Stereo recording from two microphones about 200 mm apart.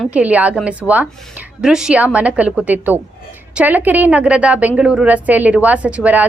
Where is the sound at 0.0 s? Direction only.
5° right (ahead or behind).